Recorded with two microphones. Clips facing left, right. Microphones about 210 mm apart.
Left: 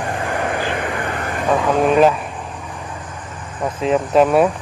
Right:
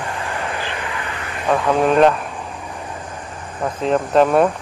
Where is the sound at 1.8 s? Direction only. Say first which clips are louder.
Even; centre (ahead or behind).